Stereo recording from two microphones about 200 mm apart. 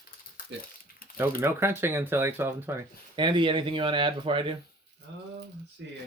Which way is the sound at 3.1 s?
25° right (ahead or behind).